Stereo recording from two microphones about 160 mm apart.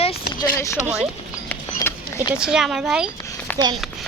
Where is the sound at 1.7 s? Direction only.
15° left (ahead or behind).